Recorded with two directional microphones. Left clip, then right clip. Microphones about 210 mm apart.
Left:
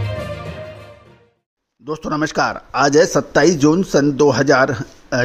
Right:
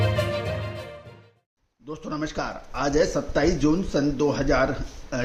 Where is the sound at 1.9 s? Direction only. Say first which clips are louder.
Left 10 dB; 45° left (ahead or behind).